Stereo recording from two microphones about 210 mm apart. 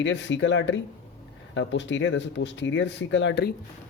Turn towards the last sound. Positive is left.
turn(degrees=55)  # may be behind; listen again after turning